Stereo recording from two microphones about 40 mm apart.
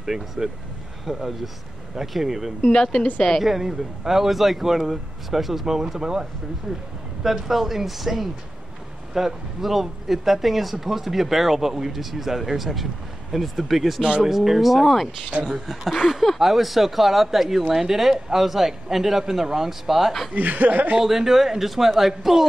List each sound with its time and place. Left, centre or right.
0.0 s speech: centre
2.7 s a woman's voice: centre
3.4 s speech: centre
7.2 s speech: centre
20.3 s speech: right
21.0 s speech: centre